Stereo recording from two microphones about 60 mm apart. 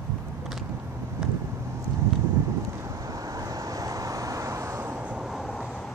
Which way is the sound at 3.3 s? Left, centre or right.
Right.